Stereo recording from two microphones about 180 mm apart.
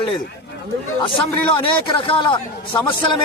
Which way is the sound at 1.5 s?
30° left (ahead or behind).